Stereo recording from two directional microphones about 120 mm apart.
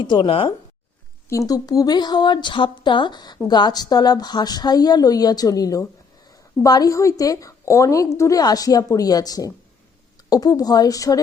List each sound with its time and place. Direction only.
0.0 s speech: 40° left (ahead or behind)
1.3 s a woman's voice: 30° left (ahead or behind)